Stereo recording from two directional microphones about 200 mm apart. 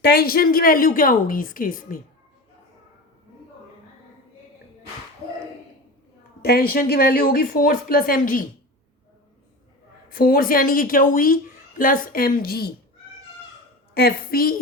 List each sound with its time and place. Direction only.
0.0 s a woman's voice: 50° left (ahead or behind)
6.4 s a woman's voice: 50° left (ahead or behind)
10.1 s a woman's voice: 45° left (ahead or behind)
13.9 s a woman's voice: 50° left (ahead or behind)